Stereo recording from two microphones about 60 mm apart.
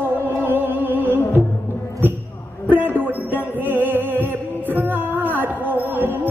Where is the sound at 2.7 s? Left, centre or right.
Right.